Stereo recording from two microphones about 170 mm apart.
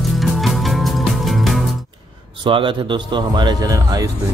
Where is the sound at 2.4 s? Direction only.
30° right (ahead or behind).